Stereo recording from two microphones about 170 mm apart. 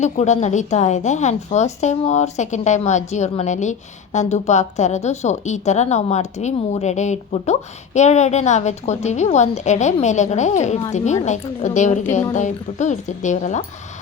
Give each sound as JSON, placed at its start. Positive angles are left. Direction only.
{"t": 0.0, "sound": "a woman's voice", "side_deg": 45}